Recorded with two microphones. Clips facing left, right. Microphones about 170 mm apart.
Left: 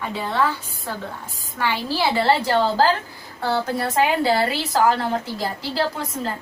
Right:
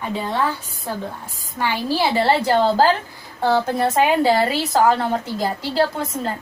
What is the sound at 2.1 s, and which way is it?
A woman's voice, 15° right (ahead or behind).